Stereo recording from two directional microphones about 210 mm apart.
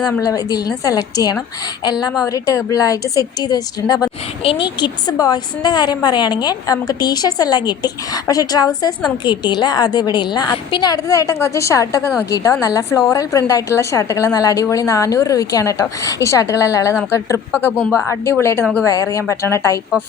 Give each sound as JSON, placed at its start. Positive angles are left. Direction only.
{"t": 0.0, "sound": "a woman's voice", "side_deg": 15}